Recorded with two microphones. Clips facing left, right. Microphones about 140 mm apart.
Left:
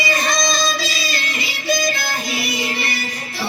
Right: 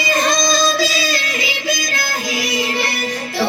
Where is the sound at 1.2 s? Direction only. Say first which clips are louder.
Right 1 dB; 90° right.